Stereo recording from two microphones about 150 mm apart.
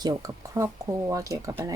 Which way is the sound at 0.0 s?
25° right (ahead or behind).